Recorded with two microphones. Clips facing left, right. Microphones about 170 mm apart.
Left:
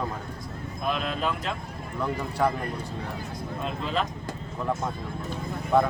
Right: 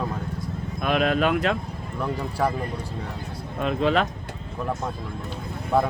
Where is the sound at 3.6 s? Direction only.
70° right (ahead or behind).